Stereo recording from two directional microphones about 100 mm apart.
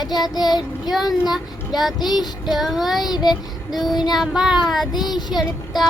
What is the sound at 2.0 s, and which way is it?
Child singing, 45° left (ahead or behind).